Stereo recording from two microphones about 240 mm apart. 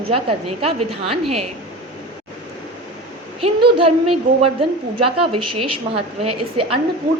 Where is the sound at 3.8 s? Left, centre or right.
Right.